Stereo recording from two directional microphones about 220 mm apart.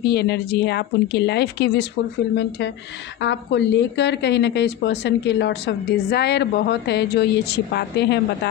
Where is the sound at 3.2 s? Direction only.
50° left (ahead or behind).